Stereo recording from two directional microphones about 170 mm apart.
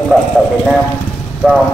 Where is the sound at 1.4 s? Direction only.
5° right (ahead or behind).